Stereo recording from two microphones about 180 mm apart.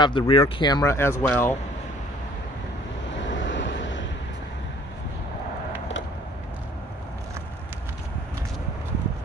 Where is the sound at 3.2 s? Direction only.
90° left.